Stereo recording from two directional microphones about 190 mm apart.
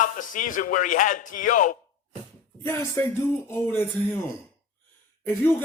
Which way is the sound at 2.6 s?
15° left (ahead or behind).